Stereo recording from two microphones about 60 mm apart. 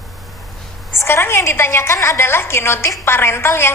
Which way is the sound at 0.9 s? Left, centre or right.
Left.